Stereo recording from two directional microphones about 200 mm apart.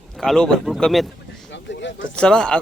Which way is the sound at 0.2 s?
Centre (ahead or behind).